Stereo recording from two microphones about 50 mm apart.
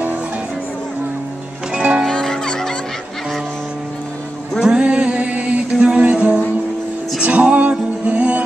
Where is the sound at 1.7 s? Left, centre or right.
Right.